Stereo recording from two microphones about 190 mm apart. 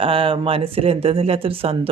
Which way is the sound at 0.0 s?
25° right (ahead or behind).